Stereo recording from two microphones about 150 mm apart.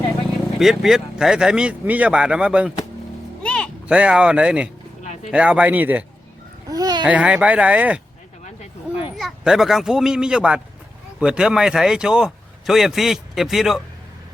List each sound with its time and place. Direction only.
0.6 s speech: centre (ahead or behind)
3.4 s music: 5° left (ahead or behind)
3.8 s speech: 5° right (ahead or behind)
6.7 s a sound: 25° right (ahead or behind)
7.0 s speech: 10° right (ahead or behind)
9.1 s speech: centre (ahead or behind)